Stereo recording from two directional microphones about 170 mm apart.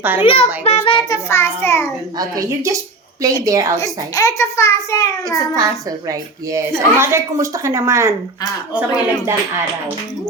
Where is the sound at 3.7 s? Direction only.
20° left (ahead or behind).